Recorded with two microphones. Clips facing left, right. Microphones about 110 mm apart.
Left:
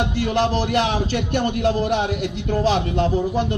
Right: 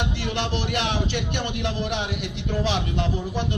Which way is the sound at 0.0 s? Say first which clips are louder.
Left 7 dB; 40° left (ahead or behind).